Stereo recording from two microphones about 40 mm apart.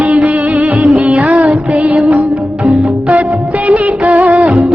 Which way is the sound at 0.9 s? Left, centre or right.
Right.